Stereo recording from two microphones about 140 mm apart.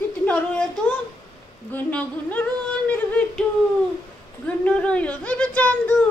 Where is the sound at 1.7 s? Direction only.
10° left (ahead or behind).